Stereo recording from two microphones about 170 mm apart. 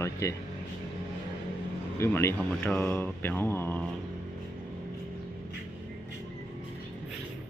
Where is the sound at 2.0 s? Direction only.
15° left (ahead or behind).